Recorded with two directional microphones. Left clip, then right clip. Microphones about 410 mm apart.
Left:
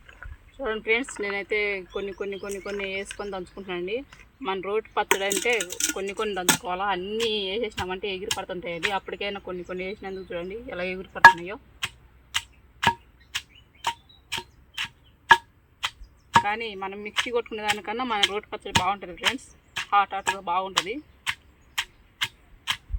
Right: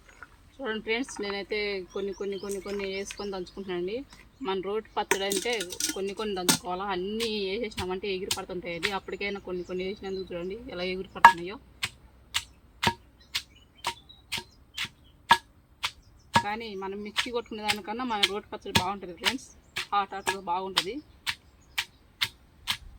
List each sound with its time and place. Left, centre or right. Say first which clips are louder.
0.6 s speech: left 5 dB; centre
13.3 s a sound: left 1 dB; centre
13.8 s clock: left 5 dB; centre
16.3 s speech: left 5 dB; centre
21.8 s tick-tock: left 2 dB; centre